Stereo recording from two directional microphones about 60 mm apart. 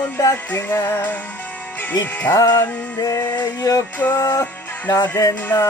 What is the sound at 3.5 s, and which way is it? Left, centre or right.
Music, left.